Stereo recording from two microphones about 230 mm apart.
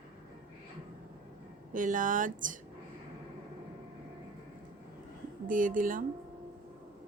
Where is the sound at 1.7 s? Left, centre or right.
Right.